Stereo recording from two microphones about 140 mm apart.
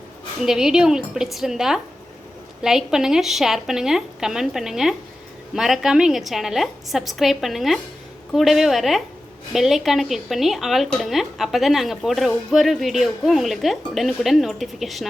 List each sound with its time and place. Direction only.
0.3 s a woman's voice: 5° right (ahead or behind)